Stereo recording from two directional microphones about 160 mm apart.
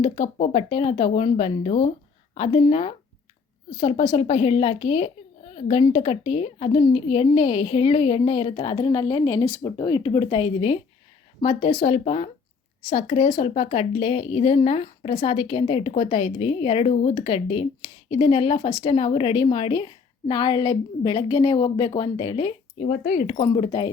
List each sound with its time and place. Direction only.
0.0 s speech: 35° left (ahead or behind)
22.8 s speech: 45° left (ahead or behind)
23.4 s speech: 30° left (ahead or behind)